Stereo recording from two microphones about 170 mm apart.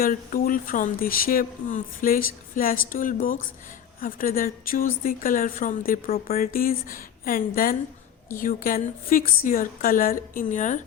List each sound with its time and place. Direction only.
0.0 s a woman's voice: 55° left (ahead or behind)